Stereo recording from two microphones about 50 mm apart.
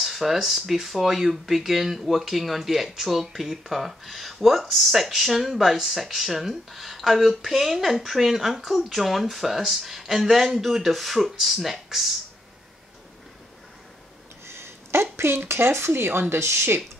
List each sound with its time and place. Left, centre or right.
0.0 s speech: centre
14.4 s speech: right